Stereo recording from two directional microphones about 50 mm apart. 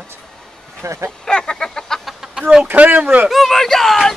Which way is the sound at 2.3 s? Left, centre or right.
Centre.